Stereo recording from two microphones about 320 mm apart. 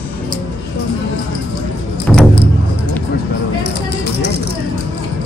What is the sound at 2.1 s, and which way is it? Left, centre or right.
Music, centre.